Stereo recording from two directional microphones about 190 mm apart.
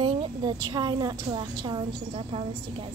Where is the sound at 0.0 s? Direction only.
25° right (ahead or behind).